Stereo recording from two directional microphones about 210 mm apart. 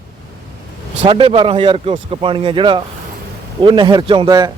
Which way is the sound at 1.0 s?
25° right (ahead or behind).